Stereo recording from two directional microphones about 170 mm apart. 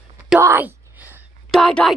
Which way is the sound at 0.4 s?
10° right (ahead or behind).